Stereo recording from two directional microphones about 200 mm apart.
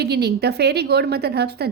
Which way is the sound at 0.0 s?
55° right (ahead or behind).